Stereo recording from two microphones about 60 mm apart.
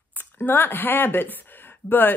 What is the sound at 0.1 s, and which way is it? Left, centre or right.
Speech, left.